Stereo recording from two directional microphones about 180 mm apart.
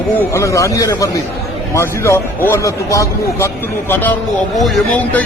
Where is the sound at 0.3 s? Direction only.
15° left (ahead or behind).